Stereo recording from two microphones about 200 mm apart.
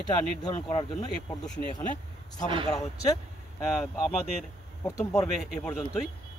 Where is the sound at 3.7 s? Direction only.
Centre (ahead or behind).